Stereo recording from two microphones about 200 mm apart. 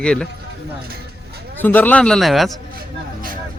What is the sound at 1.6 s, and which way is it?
Speech, 10° left (ahead or behind).